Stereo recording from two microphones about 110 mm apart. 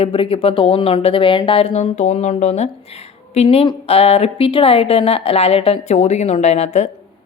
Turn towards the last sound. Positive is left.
turn(degrees=80)